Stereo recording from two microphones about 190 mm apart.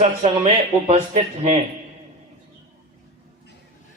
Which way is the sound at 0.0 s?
40° right (ahead or behind).